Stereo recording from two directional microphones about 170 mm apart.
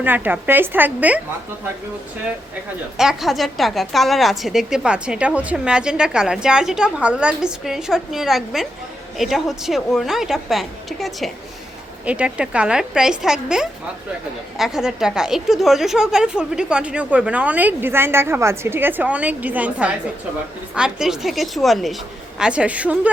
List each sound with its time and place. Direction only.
0.0 s a woman's voice: 10° right (ahead or behind)
3.0 s a woman's voice: centre (ahead or behind)